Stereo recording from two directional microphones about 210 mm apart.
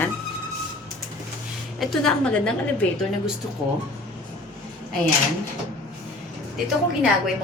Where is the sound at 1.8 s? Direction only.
Centre (ahead or behind).